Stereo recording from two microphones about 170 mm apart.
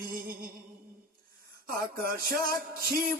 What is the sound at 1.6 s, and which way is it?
Music, 60° right (ahead or behind).